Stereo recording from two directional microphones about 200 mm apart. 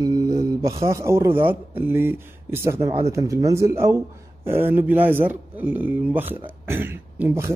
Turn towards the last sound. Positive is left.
turn(degrees=-10)  # may be behind; listen again after turning